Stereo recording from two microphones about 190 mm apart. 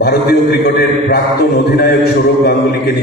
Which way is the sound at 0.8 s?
55° left (ahead or behind).